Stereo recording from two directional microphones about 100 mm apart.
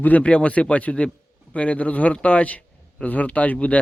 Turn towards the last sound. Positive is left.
turn(degrees=15)  # may be behind; listen again after turning